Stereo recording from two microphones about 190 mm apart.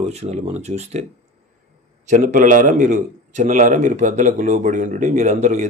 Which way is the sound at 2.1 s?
45° right (ahead or behind).